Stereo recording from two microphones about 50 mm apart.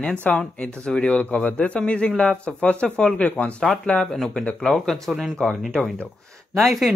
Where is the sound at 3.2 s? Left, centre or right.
Left.